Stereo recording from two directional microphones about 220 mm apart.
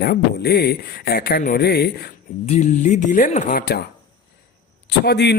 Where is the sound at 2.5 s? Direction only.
35° left (ahead or behind).